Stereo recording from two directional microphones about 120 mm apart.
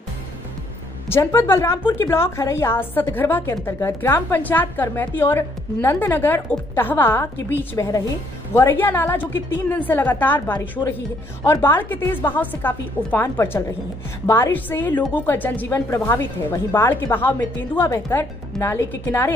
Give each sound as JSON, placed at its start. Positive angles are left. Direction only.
{"t": 1.0, "sound": "a woman's voice", "side_deg": 20}
{"t": 8.5, "sound": "a woman's voice", "side_deg": 20}